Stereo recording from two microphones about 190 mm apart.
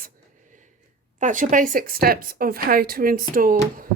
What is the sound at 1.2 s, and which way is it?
A woman's voice, 40° right (ahead or behind).